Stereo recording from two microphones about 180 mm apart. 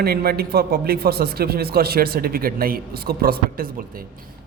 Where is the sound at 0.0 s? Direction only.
60° right (ahead or behind).